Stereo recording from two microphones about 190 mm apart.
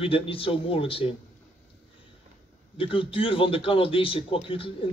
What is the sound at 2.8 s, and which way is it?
A man's voice, 30° left (ahead or behind).